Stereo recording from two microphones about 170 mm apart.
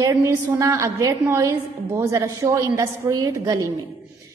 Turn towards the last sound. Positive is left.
turn(degrees=-20)  # may be behind; listen again after turning